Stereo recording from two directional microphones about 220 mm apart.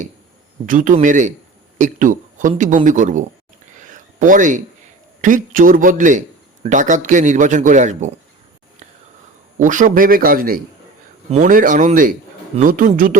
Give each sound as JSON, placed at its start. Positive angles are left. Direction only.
{"t": 0.6, "sound": "a man's voice", "side_deg": -35}
{"t": 3.8, "sound": "a sound", "side_deg": -35}
{"t": 5.2, "sound": "a man's voice", "side_deg": -35}
{"t": 9.6, "sound": "a man's voice", "side_deg": -35}